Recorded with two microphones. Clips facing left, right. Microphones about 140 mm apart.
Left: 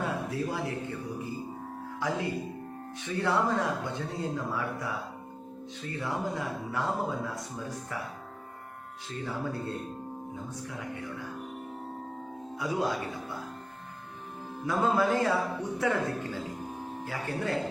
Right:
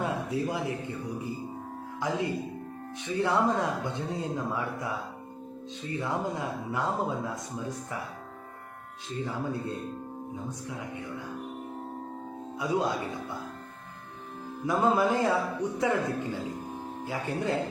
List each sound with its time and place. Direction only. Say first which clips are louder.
0.0 s speech: right 2 dB; 20° right (ahead or behind)
9.0 s speech: right 2 dB; 20° right (ahead or behind)
12.5 s speech: right 2 dB; 20° right (ahead or behind)
14.7 s speech: right 1 dB; 20° right (ahead or behind)